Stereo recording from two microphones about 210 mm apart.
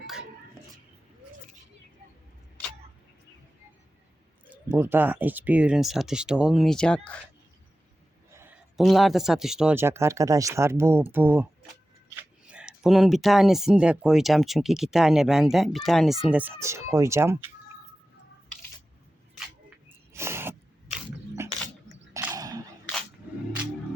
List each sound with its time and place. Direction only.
4.4 s speech: 10° right (ahead or behind)
8.3 s a sound: 10° right (ahead or behind)
8.8 s speech: centre (ahead or behind)
12.5 s speech: 5° right (ahead or behind)
20.1 s a sound: 10° right (ahead or behind)
22.1 s chewing: 15° right (ahead or behind)